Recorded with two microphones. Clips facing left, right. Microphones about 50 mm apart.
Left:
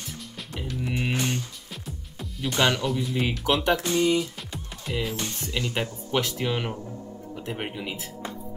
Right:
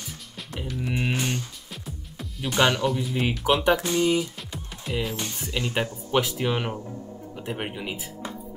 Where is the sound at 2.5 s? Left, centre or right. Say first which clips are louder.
Right 2 dB; centre.